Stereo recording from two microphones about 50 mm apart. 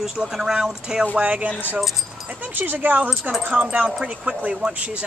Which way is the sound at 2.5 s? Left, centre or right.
Right.